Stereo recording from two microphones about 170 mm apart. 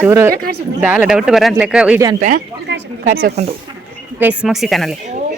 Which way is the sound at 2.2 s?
55° right (ahead or behind).